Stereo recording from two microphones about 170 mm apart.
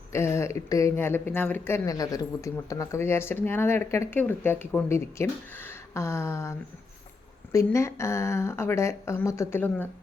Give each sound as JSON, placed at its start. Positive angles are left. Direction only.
{"t": 0.1, "sound": "speech", "side_deg": 15}